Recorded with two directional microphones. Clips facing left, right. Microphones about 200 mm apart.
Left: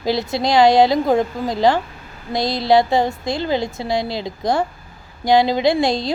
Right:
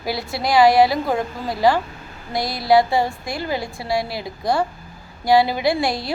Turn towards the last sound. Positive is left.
turn(degrees=20)  # may be behind; listen again after turning